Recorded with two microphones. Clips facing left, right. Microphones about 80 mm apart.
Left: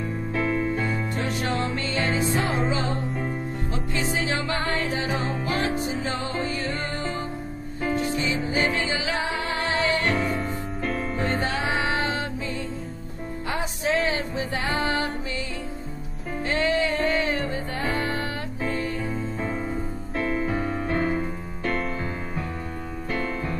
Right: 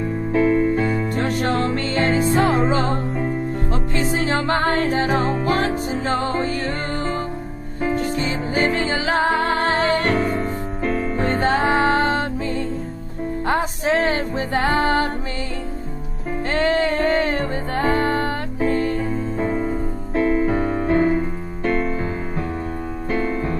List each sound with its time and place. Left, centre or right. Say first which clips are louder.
0.4 s music: right 8 dB; centre
0.7 s music: right 6 dB; right
1.1 s music: right 6 dB; right
7.8 s music: right 4 dB; right
10.8 s music: right 6 dB; centre
11.1 s music: right 8 dB; right
16.4 s music: right 4 dB; right
19.3 s music: right 7 dB; right
20.4 s music: right 7 dB; right
23.1 s piano: right 6 dB; right